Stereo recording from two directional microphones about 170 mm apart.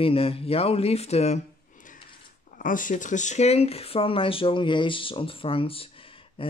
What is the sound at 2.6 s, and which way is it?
Speech, 50° left (ahead or behind).